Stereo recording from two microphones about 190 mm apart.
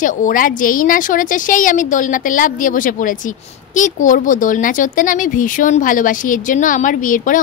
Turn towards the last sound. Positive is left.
turn(degrees=45)  # may be behind; listen again after turning